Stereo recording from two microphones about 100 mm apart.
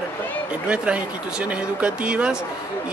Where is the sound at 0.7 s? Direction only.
15° right (ahead or behind).